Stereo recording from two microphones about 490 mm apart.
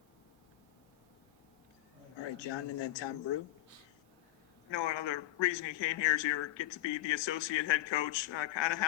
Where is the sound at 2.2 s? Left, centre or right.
Left.